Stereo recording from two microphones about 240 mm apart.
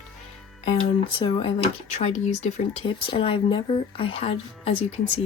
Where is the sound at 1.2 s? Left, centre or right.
Left.